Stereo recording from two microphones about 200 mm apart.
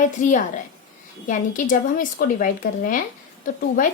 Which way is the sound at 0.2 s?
40° left (ahead or behind).